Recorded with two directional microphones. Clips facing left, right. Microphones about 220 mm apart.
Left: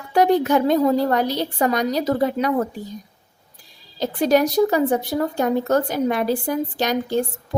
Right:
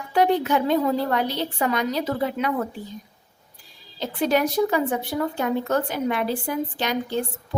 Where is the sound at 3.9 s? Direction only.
40° left (ahead or behind).